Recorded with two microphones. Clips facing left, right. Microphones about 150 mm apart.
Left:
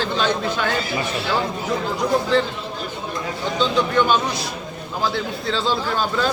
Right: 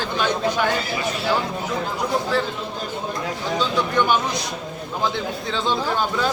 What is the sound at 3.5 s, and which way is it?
Speech, 15° right (ahead or behind).